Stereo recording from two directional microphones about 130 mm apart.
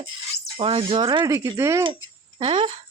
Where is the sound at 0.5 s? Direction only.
40° right (ahead or behind).